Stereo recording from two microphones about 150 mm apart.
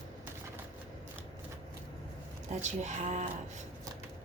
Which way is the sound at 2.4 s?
50° right (ahead or behind).